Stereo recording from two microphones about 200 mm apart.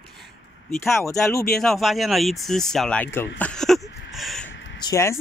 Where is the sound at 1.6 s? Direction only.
Centre (ahead or behind).